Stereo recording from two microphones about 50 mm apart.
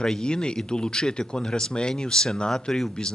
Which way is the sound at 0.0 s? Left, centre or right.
Centre.